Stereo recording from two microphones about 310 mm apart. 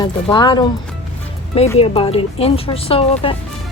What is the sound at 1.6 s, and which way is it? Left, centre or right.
Speech, centre.